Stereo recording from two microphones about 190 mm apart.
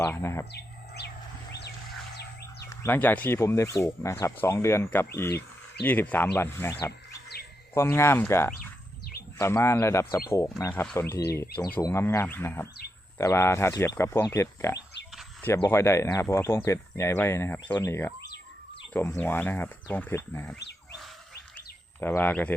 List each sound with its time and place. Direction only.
0.0 s speech: 15° left (ahead or behind)
0.5 s bird: 60° left (ahead or behind)
2.6 s speech: 10° left (ahead or behind)
22.0 s speech: 10° left (ahead or behind)